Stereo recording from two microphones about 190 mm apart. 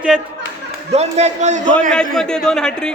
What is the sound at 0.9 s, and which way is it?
Speech, 35° right (ahead or behind).